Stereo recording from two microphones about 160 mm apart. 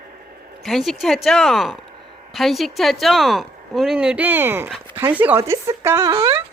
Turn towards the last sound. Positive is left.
turn(degrees=-20)  # may be behind; listen again after turning